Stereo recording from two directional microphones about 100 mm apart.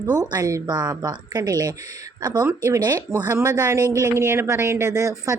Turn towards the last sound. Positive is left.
turn(degrees=-35)  # may be behind; listen again after turning